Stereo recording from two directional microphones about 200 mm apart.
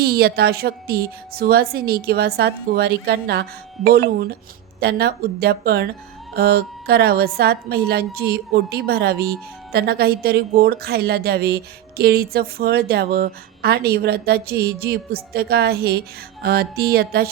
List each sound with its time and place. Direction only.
0.0 s a woman's voice: 50° right (ahead or behind)